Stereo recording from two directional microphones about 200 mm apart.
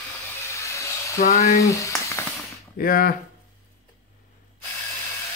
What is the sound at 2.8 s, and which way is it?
Speech, 45° left (ahead or behind).